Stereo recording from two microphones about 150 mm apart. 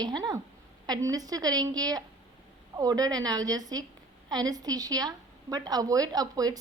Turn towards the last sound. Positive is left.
turn(degrees=-25)  # may be behind; listen again after turning